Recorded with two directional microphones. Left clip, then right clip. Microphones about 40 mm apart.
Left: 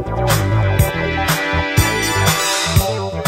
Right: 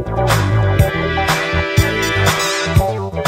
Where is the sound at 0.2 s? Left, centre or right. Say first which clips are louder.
Right 2 dB; right.